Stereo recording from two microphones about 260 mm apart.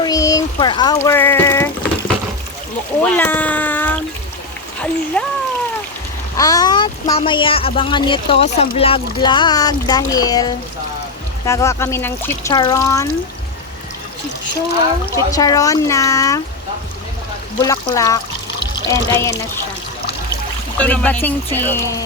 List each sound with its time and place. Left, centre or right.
0.0 s a sound: centre
3.0 s speech: centre
5.2 s speech: centre
6.3 s speech: centre
15.1 s speech: centre
17.6 s speech: centre
20.7 s speech: centre